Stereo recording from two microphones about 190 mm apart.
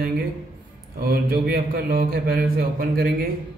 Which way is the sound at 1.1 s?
55° right (ahead or behind).